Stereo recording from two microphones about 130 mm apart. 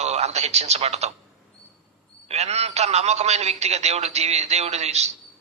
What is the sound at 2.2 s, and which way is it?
A man's voice, 55° right (ahead or behind).